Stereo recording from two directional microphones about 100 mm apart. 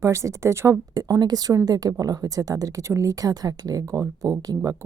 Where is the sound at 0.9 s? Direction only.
40° right (ahead or behind).